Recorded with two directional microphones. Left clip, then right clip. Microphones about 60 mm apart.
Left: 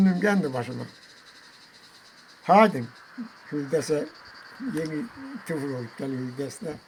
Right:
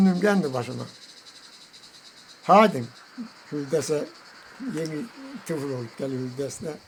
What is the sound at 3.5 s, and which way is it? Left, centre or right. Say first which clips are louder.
Speech: even; centre.